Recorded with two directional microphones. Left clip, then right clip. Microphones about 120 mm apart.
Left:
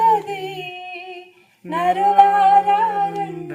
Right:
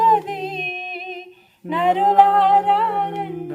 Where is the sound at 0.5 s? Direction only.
25° left (ahead or behind).